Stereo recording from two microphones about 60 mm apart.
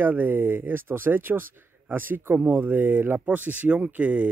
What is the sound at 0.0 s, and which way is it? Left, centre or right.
Speech, right.